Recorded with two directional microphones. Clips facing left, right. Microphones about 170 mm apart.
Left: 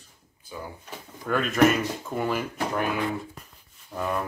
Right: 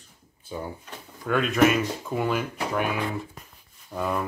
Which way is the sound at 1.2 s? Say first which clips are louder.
Even; centre (ahead or behind).